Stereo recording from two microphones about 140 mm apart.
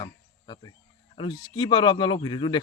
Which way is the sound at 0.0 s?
35° left (ahead or behind).